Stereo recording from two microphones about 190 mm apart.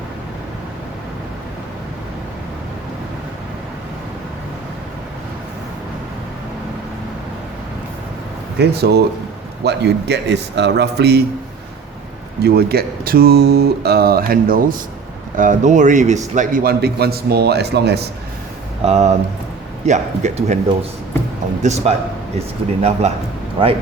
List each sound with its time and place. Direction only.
8.5 s a man's voice: 60° right (ahead or behind)
12.4 s a man's voice: 55° right (ahead or behind)
18.9 s speech: 35° right (ahead or behind)
21.6 s speech: 35° right (ahead or behind)